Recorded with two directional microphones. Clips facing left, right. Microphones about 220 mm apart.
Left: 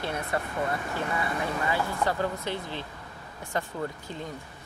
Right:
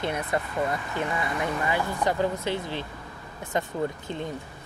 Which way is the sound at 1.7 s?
15° right (ahead or behind).